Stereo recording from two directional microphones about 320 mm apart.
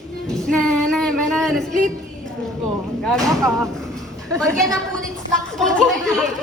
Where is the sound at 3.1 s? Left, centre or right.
Centre.